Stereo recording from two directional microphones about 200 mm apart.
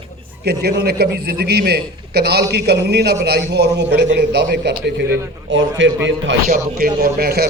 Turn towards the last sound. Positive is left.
turn(degrees=-50)  # may be behind; listen again after turning